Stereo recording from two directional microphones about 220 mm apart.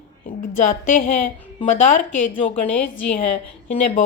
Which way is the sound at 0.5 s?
35° left (ahead or behind).